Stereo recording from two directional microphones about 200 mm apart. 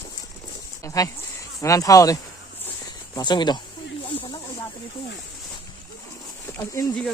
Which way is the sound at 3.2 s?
20° left (ahead or behind).